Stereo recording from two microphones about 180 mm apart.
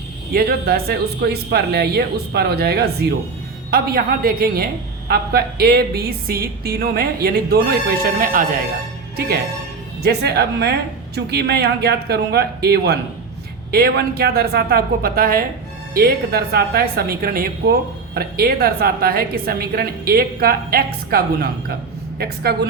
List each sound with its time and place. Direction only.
0.3 s a woman's voice: 60° right (ahead or behind)
10.0 s a woman's voice: 60° right (ahead or behind)